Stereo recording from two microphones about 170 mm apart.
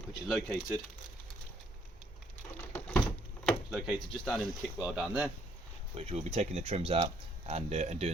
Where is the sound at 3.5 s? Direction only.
Centre (ahead or behind).